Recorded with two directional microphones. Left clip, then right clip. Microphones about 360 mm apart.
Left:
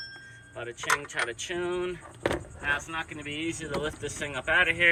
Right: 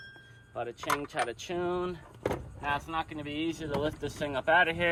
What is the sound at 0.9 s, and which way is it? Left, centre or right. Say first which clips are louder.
Speech: left 4 dB; centre.